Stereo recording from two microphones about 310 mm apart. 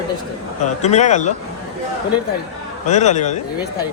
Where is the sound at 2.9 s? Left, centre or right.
Left.